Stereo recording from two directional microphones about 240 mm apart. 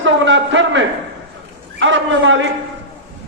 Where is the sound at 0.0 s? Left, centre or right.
Right.